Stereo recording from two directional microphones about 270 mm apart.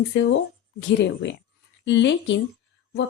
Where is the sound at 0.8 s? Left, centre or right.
Left.